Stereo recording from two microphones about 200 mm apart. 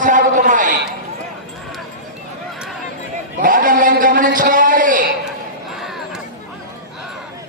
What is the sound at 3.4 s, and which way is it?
A man's voice, 45° right (ahead or behind).